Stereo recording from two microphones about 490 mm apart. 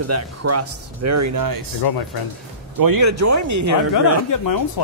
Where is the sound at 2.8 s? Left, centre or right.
Right.